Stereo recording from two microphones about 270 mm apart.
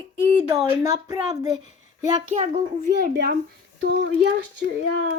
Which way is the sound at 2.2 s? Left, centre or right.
Right.